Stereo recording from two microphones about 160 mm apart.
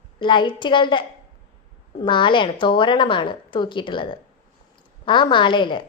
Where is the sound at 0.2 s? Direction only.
30° left (ahead or behind).